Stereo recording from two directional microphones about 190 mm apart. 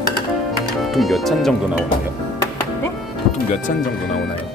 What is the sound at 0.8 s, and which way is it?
Speech, centre (ahead or behind).